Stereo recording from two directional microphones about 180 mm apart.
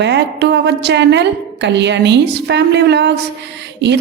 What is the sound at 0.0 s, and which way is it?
A woman's voice, 70° right (ahead or behind).